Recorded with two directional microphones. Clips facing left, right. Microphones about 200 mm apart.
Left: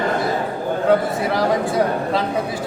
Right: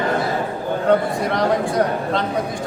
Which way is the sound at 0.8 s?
5° left (ahead or behind).